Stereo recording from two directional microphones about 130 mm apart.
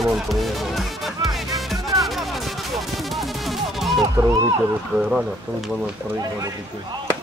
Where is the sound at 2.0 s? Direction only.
Centre (ahead or behind).